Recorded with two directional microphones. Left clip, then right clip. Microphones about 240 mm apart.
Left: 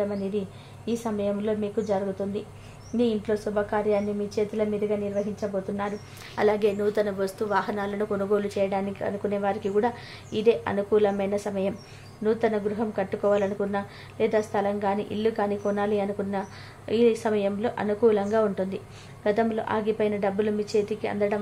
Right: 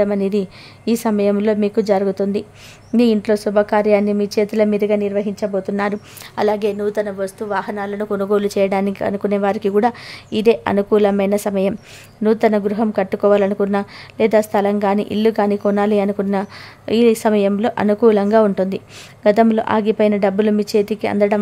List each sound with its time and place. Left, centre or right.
0.0 s a woman's voice: right
6.3 s a woman's voice: right